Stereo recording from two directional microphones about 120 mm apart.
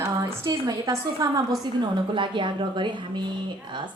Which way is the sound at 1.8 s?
40° right (ahead or behind).